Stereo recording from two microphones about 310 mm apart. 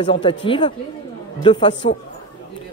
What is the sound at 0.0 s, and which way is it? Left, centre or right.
Speech, centre.